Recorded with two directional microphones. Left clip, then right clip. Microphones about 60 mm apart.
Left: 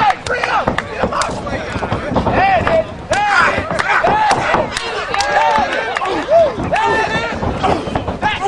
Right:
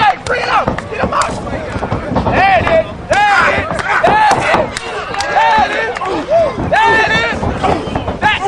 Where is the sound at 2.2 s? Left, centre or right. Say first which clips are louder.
Right 3 dB; right.